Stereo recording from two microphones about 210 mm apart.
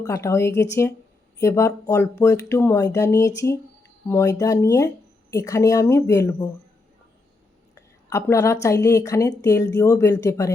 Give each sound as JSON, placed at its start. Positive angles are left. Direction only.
{"t": 0.0, "sound": "a woman's voice", "side_deg": 15}
{"t": 7.8, "sound": "a sound", "side_deg": 15}
{"t": 8.6, "sound": "a woman's voice", "side_deg": 15}